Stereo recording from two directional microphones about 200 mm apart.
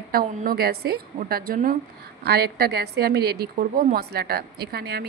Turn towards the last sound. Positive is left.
turn(degrees=-50)  # may be behind; listen again after turning